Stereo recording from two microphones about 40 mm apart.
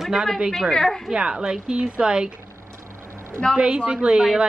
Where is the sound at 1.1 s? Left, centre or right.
Right.